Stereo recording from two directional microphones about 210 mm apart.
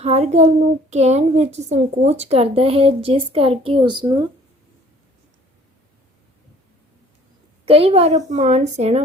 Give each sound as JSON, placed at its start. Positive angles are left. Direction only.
{"t": 0.0, "sound": "a woman's voice", "side_deg": -30}
{"t": 7.6, "sound": "a woman's voice", "side_deg": -25}